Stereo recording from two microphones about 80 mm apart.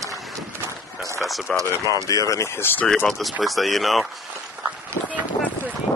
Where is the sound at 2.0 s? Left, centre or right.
Left.